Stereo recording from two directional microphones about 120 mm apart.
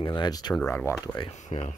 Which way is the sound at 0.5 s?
10° left (ahead or behind).